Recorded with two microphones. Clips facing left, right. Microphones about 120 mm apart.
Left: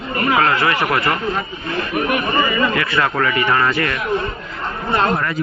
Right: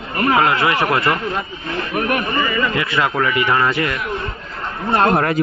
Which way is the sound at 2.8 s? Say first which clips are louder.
Even; 20° right (ahead or behind).